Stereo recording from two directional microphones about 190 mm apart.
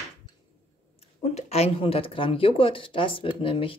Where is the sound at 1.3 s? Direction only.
35° left (ahead or behind).